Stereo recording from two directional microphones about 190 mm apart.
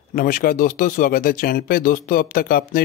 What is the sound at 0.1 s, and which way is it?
Speech, 45° left (ahead or behind).